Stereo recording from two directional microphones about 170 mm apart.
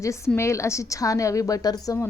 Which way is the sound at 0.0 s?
15° left (ahead or behind).